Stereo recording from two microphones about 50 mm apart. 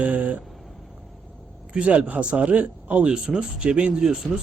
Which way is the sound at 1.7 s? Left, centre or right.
Right.